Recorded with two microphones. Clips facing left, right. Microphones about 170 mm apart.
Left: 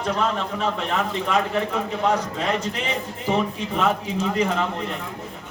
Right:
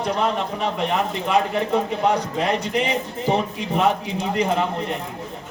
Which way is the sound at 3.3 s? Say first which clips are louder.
Right 1 dB; 35° right (ahead or behind).